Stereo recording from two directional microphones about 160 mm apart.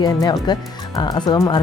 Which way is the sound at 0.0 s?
30° left (ahead or behind).